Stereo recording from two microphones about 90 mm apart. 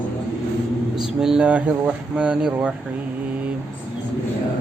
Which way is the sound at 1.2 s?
10° right (ahead or behind).